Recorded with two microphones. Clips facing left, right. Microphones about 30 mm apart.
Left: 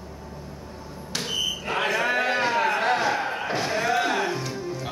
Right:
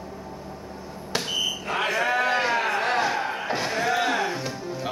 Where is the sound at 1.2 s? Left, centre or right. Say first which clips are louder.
Left 1 dB; centre.